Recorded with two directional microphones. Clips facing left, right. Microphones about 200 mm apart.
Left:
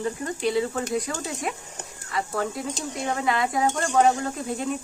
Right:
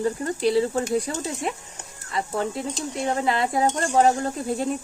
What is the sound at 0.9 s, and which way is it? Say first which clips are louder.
Stir: right 3 dB; 30° right (ahead or behind).